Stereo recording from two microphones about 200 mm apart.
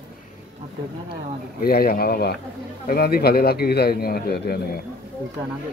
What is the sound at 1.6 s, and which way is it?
A man's voice, 50° left (ahead or behind).